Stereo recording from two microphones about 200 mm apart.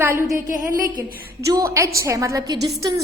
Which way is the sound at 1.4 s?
15° right (ahead or behind).